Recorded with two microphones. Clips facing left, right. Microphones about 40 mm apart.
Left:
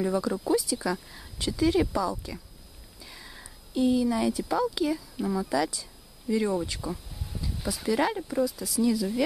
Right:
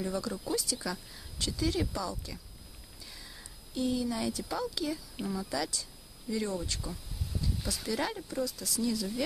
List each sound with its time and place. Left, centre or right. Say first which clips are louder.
0.0 s speech: left 7 dB; centre